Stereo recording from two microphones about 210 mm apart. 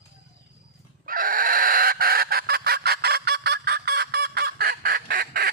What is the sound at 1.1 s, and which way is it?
Chicken, 45° right (ahead or behind).